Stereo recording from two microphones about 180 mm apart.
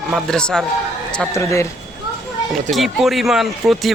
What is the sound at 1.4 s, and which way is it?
Speech, 15° left (ahead or behind).